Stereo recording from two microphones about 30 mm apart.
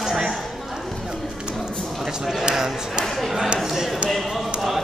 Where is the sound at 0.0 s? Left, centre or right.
Centre.